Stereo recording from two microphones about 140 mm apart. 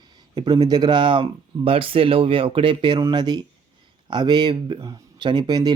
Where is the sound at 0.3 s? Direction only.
30° right (ahead or behind).